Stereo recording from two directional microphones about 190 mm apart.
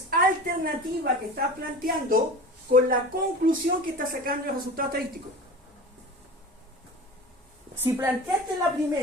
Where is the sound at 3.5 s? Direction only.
50° right (ahead or behind).